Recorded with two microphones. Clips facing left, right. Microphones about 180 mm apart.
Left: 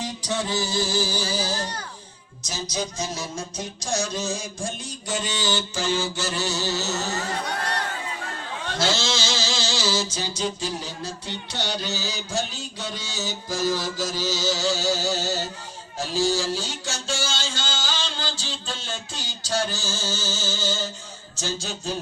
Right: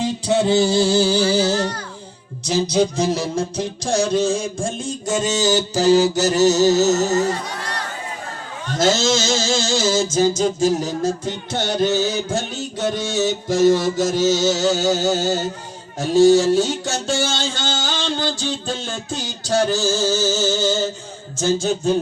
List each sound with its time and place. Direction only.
0.3 s music: 70° right (ahead or behind)
1.4 s speech: 70° right (ahead or behind)
2.5 s a sound: 60° right (ahead or behind)
5.0 s music: 45° right (ahead or behind)
7.4 s crowd: 60° left (ahead or behind)
8.7 s music: 45° right (ahead or behind)
21.4 s a sound: 55° right (ahead or behind)